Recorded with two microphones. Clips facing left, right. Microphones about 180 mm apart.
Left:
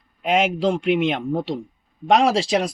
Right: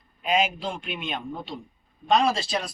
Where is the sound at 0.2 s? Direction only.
75° left (ahead or behind).